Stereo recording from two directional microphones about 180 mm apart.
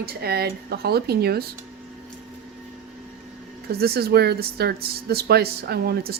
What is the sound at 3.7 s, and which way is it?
Speech, 60° right (ahead or behind).